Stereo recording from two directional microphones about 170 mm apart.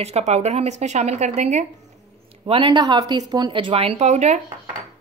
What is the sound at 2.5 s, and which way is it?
A woman's voice, 30° right (ahead or behind).